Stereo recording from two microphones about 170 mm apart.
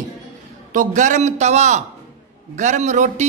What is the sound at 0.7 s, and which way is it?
A man's voice, 45° right (ahead or behind).